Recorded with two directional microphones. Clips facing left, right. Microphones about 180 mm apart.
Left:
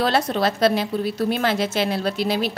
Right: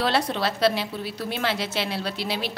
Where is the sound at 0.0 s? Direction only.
45° left (ahead or behind).